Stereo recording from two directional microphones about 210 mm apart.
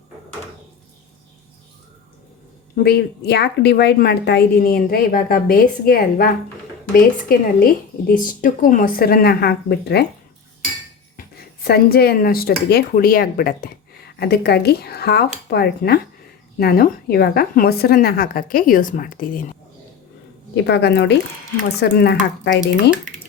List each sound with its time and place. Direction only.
2.7 s a woman's voice: 50° left (ahead or behind)
11.2 s a woman's voice: 45° left (ahead or behind)
20.7 s a woman's voice: 55° left (ahead or behind)